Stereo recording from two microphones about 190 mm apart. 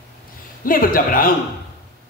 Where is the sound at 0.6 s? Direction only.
45° left (ahead or behind).